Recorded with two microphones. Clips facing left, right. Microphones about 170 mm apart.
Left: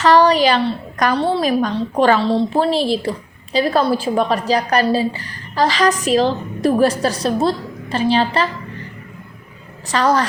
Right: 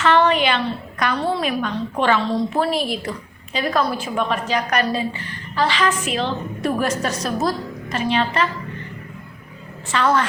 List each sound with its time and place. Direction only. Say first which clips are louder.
0.0 s a woman's voice: left 4 dB; 35° left (ahead or behind)
9.9 s a woman's voice: left 3 dB; 40° left (ahead or behind)